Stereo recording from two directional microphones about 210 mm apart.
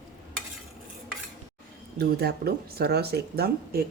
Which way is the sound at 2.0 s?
45° right (ahead or behind).